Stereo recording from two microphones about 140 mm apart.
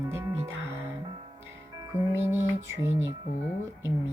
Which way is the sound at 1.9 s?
20° right (ahead or behind).